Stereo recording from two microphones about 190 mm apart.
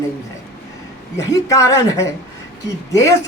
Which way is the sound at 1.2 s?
15° left (ahead or behind).